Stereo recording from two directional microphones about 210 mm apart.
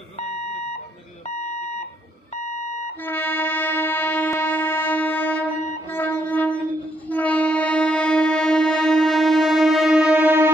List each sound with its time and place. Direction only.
0.2 s alarm: 30° left (ahead or behind)
3.1 s train: 10° left (ahead or behind); by 10.5 s 10° right (ahead or behind)